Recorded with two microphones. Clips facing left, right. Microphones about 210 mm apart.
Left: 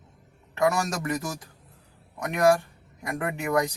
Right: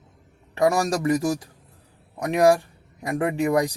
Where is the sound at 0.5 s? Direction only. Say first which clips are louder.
Right 4 dB; 30° right (ahead or behind).